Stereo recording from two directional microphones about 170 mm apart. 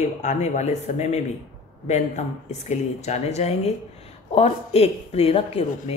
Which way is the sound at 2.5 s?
40° left (ahead or behind).